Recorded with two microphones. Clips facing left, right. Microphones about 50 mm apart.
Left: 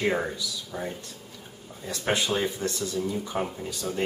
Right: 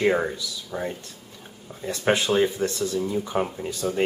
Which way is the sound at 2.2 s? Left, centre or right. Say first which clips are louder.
Right 5 dB; centre.